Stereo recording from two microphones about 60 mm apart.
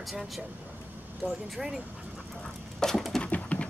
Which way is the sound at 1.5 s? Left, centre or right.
Centre.